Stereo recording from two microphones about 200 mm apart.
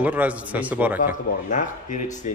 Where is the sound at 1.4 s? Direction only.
40° left (ahead or behind).